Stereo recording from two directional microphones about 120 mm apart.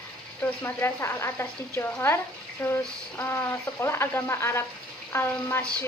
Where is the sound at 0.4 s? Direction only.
20° left (ahead or behind).